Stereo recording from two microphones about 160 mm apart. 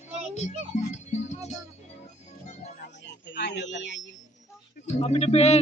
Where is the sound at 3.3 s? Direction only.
90° left.